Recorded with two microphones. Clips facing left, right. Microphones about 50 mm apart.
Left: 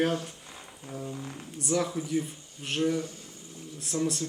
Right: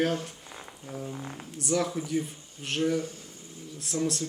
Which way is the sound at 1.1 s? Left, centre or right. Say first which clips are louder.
Even; centre.